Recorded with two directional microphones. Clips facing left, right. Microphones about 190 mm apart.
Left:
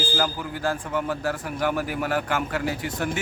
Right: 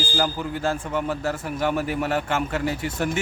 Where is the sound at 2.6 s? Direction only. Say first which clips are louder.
Right 2 dB; 5° right (ahead or behind).